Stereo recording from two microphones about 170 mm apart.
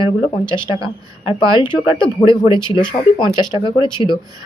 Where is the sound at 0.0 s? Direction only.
30° left (ahead or behind).